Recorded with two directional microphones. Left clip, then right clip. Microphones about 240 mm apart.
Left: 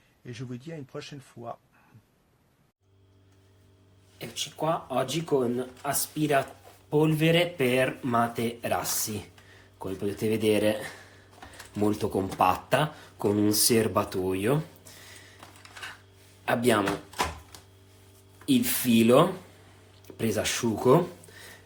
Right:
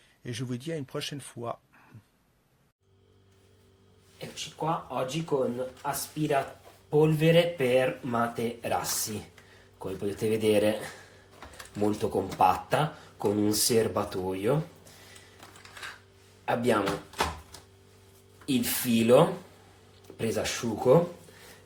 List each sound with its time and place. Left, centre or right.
0.3 s speech: right
4.2 s speech: left
16.5 s speech: left
18.4 s speech: left